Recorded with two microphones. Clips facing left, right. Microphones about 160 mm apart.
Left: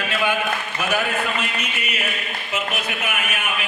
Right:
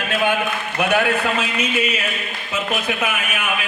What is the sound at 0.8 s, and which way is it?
A man's voice, 65° right (ahead or behind).